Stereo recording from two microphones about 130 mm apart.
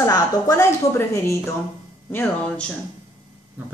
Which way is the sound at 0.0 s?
25° left (ahead or behind).